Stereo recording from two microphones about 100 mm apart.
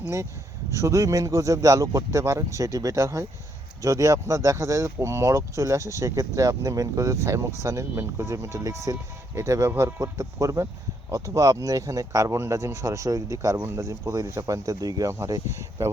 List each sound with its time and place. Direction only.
0.0 s speech: 30° right (ahead or behind)